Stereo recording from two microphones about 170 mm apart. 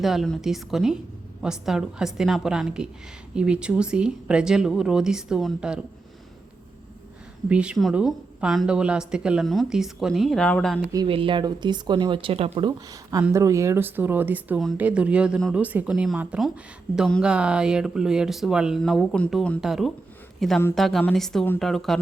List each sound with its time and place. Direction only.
0.0 s speech: centre (ahead or behind)
7.5 s speech: 5° right (ahead or behind)
10.9 s speech: 30° right (ahead or behind)
12.9 s speech: 20° right (ahead or behind); by 21.9 s centre (ahead or behind)